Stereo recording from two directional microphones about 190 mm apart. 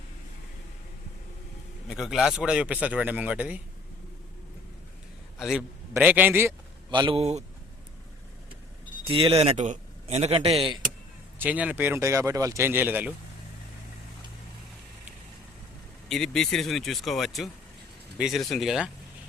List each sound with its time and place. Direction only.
1.9 s speech: centre (ahead or behind)
5.4 s a man's voice: centre (ahead or behind)
6.9 s a man's voice: 25° right (ahead or behind)
9.0 s a man's voice: 30° right (ahead or behind)
11.3 s speech: 10° right (ahead or behind)
16.0 s speech: centre (ahead or behind)